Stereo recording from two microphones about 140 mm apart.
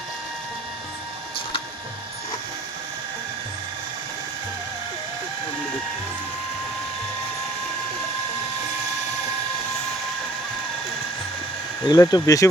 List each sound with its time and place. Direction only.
11.9 s speech: 25° left (ahead or behind)